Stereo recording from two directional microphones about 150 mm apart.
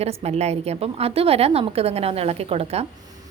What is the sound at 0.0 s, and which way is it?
A woman's voice, 45° right (ahead or behind).